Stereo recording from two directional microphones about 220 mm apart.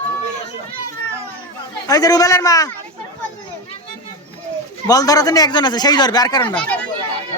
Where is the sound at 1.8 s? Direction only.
15° left (ahead or behind).